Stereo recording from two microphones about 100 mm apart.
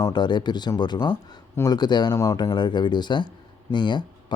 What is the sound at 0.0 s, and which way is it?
Speech, 45° left (ahead or behind).